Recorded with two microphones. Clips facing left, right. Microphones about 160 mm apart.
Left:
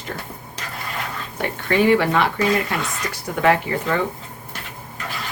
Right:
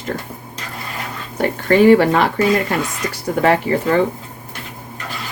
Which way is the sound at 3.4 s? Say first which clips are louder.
Right 3 dB; 35° right (ahead or behind).